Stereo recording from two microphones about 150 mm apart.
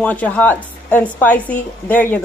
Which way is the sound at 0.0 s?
10° left (ahead or behind).